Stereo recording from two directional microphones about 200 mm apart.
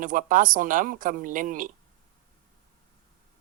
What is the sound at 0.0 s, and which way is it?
A woman's voice, 40° right (ahead or behind).